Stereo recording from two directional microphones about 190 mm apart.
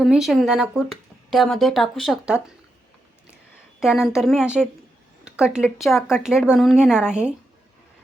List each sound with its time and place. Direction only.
0.0 s speech: centre (ahead or behind)
3.8 s a woman's voice: centre (ahead or behind)